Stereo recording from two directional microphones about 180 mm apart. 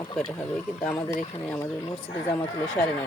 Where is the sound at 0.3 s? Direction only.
5° left (ahead or behind).